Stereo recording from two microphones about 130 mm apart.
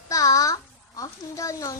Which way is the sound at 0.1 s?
25° left (ahead or behind).